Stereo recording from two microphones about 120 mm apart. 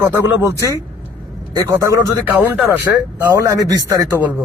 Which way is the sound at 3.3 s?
30° right (ahead or behind).